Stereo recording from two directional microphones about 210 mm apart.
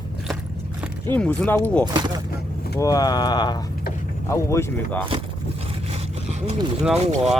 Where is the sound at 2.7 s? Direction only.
15° left (ahead or behind).